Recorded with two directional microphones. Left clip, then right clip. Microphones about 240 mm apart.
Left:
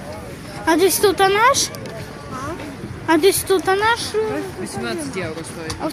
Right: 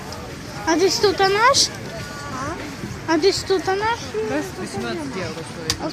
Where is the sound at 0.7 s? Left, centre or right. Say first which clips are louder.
Left 2 dB; centre.